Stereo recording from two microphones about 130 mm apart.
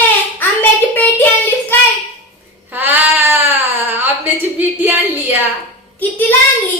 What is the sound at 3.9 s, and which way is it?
Speech, 15° right (ahead or behind).